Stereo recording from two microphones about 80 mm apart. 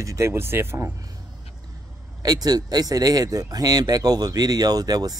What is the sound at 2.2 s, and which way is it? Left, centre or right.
Speech, right.